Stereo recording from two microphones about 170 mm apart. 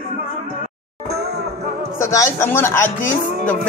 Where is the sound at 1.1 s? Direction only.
70° right (ahead or behind).